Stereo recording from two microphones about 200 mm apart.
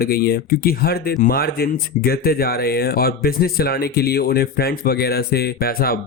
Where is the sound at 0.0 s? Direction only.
50° left (ahead or behind).